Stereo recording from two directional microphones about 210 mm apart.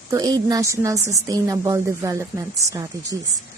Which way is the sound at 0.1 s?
15° right (ahead or behind).